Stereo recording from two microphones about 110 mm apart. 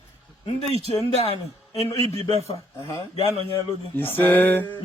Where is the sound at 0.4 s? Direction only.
70° left (ahead or behind).